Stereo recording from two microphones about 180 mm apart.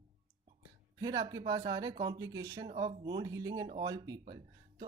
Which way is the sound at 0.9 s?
20° right (ahead or behind).